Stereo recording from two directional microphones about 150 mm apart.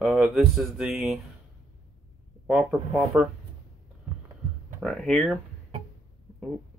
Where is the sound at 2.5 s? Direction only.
5° right (ahead or behind).